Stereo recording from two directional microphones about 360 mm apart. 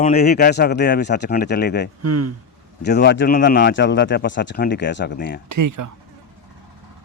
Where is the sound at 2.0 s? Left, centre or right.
Right.